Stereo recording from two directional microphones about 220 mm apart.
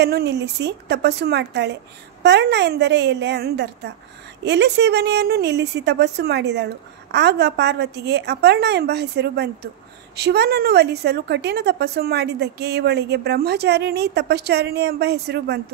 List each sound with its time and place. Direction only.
0.0 s a woman's voice: 50° right (ahead or behind)